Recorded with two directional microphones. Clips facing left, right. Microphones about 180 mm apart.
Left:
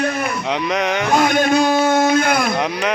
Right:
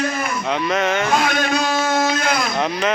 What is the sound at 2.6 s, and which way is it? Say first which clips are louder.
Speech: even; 10° left (ahead or behind).